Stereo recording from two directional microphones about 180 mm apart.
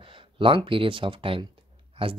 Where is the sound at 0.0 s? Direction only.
30° right (ahead or behind).